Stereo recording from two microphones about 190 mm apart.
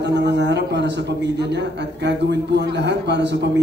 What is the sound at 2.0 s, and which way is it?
A man's voice, 65° right (ahead or behind).